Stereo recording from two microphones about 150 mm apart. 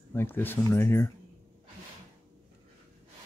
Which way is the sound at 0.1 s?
15° left (ahead or behind).